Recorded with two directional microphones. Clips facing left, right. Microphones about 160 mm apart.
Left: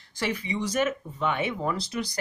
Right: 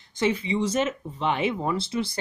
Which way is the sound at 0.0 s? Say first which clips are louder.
Right 5 dB; 20° right (ahead or behind).